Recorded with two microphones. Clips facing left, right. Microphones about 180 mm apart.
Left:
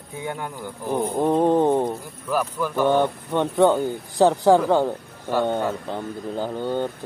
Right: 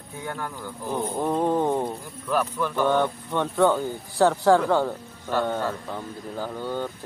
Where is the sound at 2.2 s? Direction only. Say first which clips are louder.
Left 1 dB; 10° left (ahead or behind).